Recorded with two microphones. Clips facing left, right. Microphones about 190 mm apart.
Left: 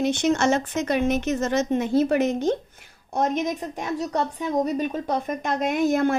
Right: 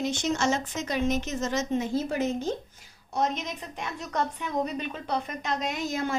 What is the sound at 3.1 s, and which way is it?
A woman's voice, 50° left (ahead or behind).